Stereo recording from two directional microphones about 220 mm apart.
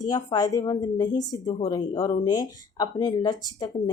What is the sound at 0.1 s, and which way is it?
Speech, 20° left (ahead or behind).